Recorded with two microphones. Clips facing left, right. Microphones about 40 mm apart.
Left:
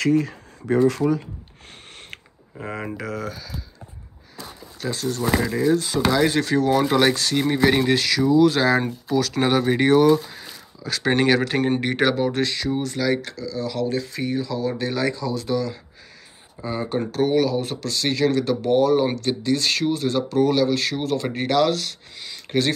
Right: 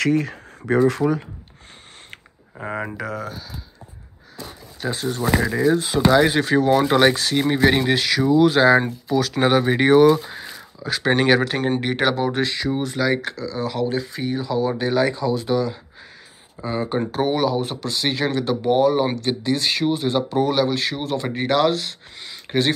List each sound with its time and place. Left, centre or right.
0.0 s speech: right
3.0 s speech: centre
4.7 s speech: right
5.2 s speech: centre
5.7 s speech: right
10.4 s a sound: centre
11.4 s speech: centre; by 13.2 s right
13.2 s speech: right
16.6 s speech: centre
17.1 s speech: right